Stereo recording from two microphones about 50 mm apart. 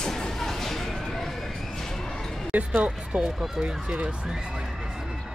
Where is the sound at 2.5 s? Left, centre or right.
Right.